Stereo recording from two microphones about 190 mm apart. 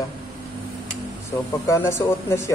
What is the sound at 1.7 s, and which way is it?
Speech, 15° left (ahead or behind).